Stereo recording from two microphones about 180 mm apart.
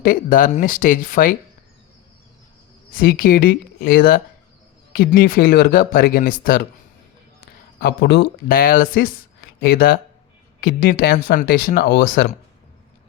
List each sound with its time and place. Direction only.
0.0 s speech: 50° left (ahead or behind)
2.9 s speech: 55° left (ahead or behind)
7.8 s speech: 65° left (ahead or behind)